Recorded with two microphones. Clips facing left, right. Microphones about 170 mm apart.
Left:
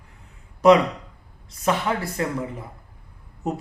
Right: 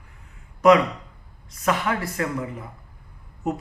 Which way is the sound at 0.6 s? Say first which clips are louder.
Left 1 dB; 30° left (ahead or behind).